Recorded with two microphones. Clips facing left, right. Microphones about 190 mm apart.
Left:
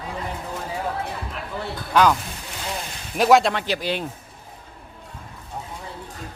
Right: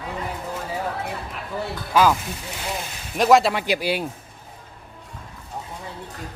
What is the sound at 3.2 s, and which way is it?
Speech, centre (ahead or behind).